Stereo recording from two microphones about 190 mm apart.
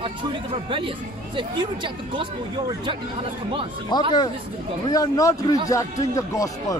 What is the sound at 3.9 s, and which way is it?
Speech, 25° left (ahead or behind).